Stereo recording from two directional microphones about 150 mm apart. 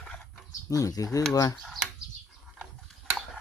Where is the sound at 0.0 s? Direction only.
5° left (ahead or behind).